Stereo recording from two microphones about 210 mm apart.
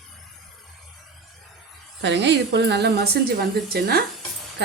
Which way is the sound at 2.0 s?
55° right (ahead or behind).